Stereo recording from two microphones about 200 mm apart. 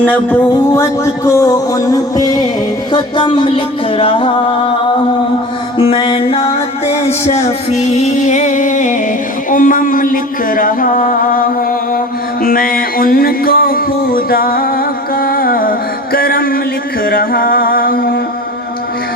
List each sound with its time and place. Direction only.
0.0 s music: 10° left (ahead or behind); by 4.7 s 25° left (ahead or behind)
5.7 s mantra: 25° left (ahead or behind)
6.8 s music: 30° left (ahead or behind); by 18.2 s 50° left (ahead or behind)